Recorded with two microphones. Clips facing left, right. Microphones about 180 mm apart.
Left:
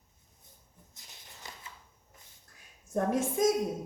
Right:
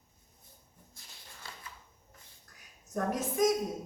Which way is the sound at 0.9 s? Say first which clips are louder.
Even; 20° left (ahead or behind).